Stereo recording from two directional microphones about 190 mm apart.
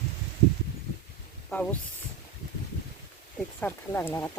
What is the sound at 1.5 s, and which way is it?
Speech, 5° left (ahead or behind).